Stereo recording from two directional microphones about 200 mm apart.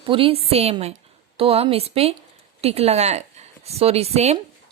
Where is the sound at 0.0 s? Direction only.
30° right (ahead or behind).